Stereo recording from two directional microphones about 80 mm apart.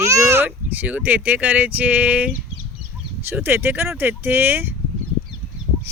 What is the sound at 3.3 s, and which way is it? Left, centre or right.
Speech, right.